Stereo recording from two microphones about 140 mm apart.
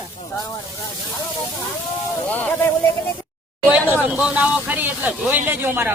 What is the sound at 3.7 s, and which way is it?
Speech, 10° right (ahead or behind).